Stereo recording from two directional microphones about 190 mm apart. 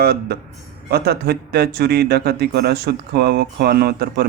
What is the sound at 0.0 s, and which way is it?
Speech, 55° right (ahead or behind).